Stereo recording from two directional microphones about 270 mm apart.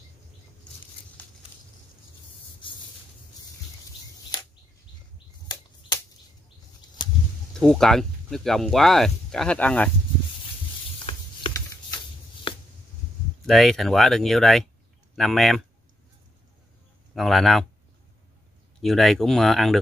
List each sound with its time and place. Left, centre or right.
7.5 s speech: centre
11.1 s typing: centre
12.5 s a sound: centre
13.5 s speech: centre
17.1 s speech: centre
18.8 s speech: centre